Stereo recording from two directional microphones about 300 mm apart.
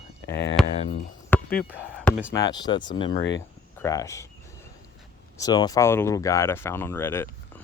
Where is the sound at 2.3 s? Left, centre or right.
Centre.